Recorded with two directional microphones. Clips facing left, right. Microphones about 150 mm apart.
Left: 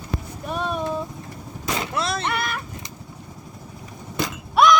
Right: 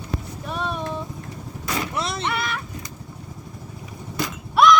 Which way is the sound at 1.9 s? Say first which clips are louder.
Left 2 dB; 20° right (ahead or behind).